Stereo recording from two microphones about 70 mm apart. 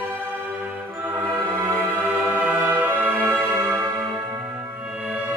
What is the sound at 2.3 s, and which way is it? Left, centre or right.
Music, right.